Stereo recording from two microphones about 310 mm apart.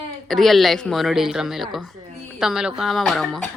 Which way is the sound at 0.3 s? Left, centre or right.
Centre.